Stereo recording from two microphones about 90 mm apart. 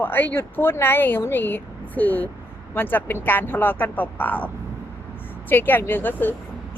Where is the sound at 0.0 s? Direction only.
20° left (ahead or behind).